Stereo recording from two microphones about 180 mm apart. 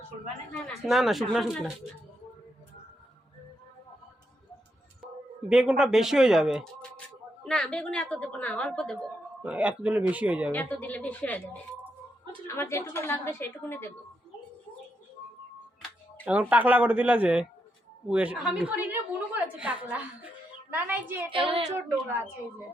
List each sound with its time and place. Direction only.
0.7 s speech: centre (ahead or behind)
5.5 s speech: 5° right (ahead or behind)
9.4 s speech: 5° right (ahead or behind)
10.5 s a woman's voice: 10° left (ahead or behind)
12.5 s a woman's voice: 15° left (ahead or behind)
16.2 s a woman's voice: 10° right (ahead or behind)
21.3 s a woman's voice: 30° right (ahead or behind)